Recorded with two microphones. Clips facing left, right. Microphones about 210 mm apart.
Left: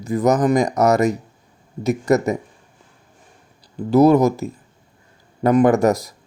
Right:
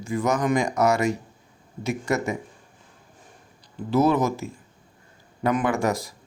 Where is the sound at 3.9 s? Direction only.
40° left (ahead or behind).